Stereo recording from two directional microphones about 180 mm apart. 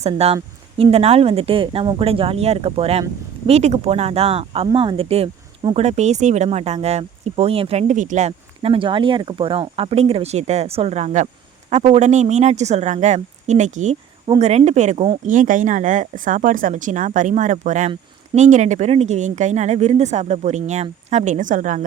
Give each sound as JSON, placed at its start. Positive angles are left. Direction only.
{"t": 0.0, "sound": "speech", "side_deg": -35}
{"t": 15.3, "sound": "speech", "side_deg": -45}